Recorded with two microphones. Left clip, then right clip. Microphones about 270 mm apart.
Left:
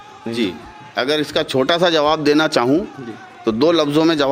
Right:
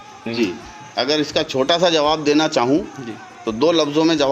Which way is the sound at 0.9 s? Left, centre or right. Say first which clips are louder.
Left 1 dB; left.